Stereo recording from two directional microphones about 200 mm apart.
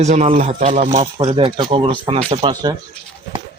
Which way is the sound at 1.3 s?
25° right (ahead or behind).